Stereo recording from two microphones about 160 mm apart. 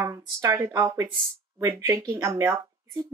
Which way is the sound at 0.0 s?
15° right (ahead or behind).